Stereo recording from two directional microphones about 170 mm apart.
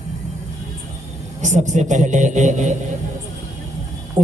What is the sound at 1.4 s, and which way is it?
A man's voice, 45° right (ahead or behind).